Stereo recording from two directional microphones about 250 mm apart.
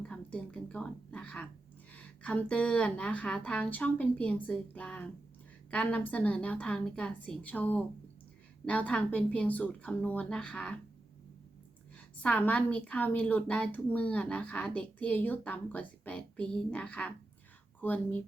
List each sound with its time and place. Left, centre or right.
0.1 s whispering: centre
1.9 s a woman's voice: centre
11.9 s a woman's voice: centre